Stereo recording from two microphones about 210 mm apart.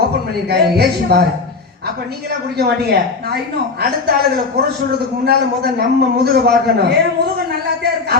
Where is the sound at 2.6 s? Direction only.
50° right (ahead or behind).